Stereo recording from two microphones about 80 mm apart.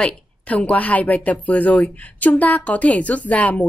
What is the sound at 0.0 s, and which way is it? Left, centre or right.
A woman's voice, centre.